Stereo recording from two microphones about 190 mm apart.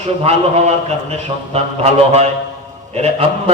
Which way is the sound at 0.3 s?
35° right (ahead or behind).